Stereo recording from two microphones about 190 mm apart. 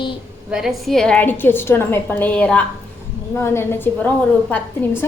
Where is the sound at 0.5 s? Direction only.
Centre (ahead or behind).